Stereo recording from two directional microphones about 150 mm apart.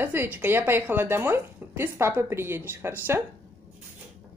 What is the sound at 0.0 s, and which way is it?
A woman's voice, 15° right (ahead or behind).